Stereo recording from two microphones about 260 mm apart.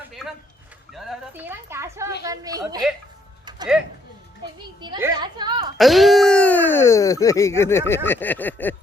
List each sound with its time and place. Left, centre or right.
0.2 s a sound: centre
0.9 s speech: centre
4.8 s speech: centre
5.7 s speech: centre